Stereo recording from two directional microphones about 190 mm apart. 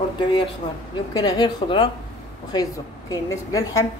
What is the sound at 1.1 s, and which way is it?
A woman's voice, 20° left (ahead or behind).